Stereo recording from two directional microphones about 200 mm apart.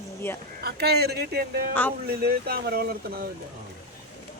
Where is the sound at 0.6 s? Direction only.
55° right (ahead or behind).